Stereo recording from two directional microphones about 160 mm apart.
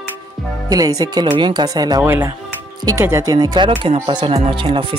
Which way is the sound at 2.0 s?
15° right (ahead or behind).